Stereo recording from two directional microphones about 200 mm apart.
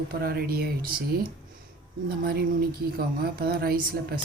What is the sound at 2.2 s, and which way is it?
Speech, 50° right (ahead or behind).